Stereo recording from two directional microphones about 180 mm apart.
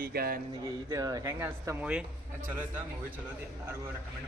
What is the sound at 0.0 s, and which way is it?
Speech, 55° right (ahead or behind).